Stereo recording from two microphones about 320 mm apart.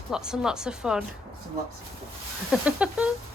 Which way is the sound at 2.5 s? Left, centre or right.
Centre.